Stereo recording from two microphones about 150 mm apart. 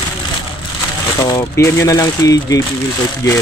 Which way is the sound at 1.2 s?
20° left (ahead or behind).